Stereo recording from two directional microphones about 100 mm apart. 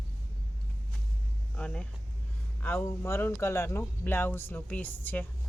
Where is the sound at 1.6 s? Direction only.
10° left (ahead or behind).